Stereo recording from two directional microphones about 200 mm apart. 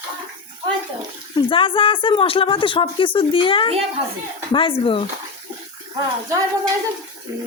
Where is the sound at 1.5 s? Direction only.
25° left (ahead or behind).